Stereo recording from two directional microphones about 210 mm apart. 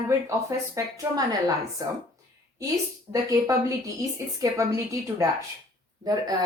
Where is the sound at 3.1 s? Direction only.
15° right (ahead or behind).